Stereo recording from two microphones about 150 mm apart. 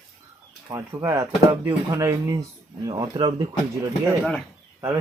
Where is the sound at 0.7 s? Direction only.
20° right (ahead or behind).